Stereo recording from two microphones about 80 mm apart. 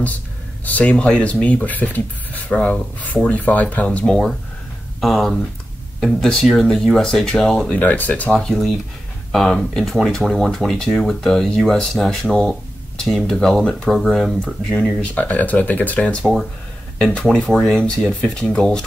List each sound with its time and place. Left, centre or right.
0.7 s speech: centre
4.0 s speech: centre
7.7 s speech: left
8.3 s speech: centre
14.4 s speech: centre